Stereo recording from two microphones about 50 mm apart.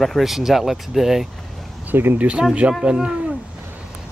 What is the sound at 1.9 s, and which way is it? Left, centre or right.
Speech, right.